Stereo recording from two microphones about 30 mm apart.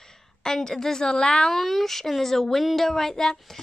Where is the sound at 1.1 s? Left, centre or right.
Left.